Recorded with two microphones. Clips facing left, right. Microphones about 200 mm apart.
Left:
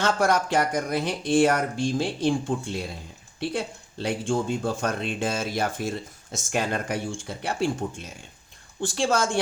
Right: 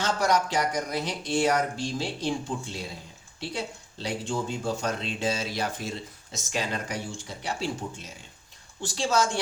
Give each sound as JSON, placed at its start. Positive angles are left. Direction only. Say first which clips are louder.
{"t": 0.0, "sound": "speech", "louder": "left 2 dB", "side_deg": 55}